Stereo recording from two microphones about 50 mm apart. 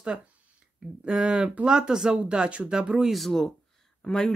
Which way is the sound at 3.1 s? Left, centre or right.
Centre.